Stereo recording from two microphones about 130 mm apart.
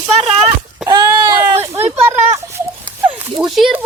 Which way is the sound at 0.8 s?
30° right (ahead or behind).